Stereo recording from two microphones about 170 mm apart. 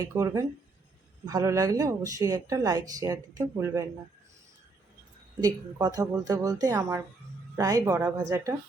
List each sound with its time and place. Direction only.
0.0 s speech: 20° right (ahead or behind)
5.4 s speech: 20° right (ahead or behind)